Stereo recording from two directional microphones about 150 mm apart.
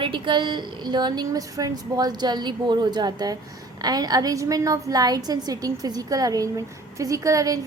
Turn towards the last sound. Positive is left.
turn(degrees=-25)  # may be behind; listen again after turning